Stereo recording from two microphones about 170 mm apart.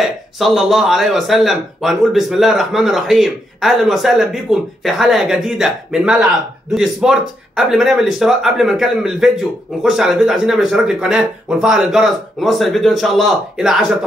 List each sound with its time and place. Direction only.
0.0 s speech: centre (ahead or behind)